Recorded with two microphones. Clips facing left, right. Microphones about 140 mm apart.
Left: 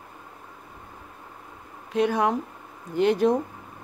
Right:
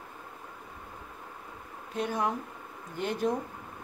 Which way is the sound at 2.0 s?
90° left.